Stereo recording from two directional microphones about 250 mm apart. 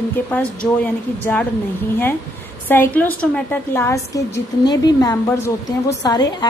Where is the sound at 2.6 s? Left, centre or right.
Centre.